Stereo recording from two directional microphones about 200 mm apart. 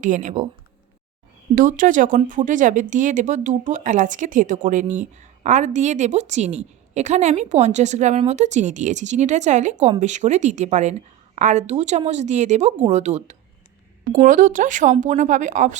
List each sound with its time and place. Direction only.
0.0 s speech: 40° right (ahead or behind)
1.5 s speech: 40° right (ahead or behind)